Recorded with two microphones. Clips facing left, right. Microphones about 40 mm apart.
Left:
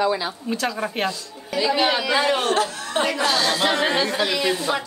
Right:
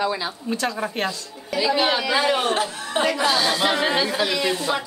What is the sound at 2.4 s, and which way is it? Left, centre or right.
Speech, centre.